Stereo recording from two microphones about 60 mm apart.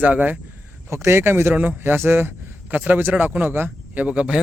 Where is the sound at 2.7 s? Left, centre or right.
Right.